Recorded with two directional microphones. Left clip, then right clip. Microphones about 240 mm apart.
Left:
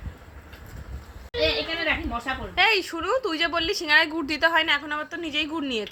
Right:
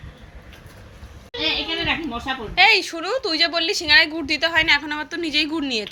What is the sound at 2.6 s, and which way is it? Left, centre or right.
A woman's voice, centre.